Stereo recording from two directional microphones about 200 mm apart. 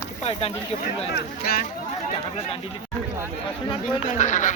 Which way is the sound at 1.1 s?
50° left (ahead or behind).